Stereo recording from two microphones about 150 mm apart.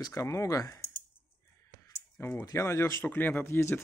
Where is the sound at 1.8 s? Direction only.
15° left (ahead or behind).